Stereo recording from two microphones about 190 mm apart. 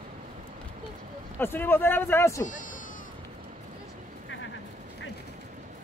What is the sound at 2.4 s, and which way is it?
Speech, 45° left (ahead or behind).